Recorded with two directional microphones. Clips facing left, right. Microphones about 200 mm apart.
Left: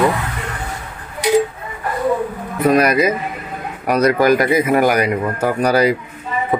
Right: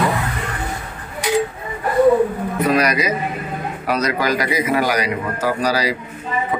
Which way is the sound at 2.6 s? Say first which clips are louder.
Left 5 dB; 50° left (ahead or behind).